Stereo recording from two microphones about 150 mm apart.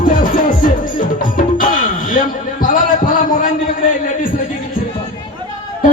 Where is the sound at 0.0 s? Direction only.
60° left (ahead or behind).